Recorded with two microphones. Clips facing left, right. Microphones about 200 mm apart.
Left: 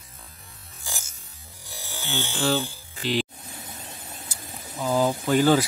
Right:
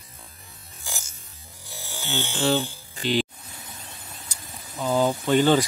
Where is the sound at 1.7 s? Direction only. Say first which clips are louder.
Even; 15° left (ahead or behind).